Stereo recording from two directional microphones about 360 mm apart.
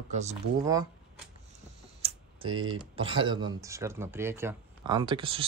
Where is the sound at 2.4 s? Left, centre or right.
Right.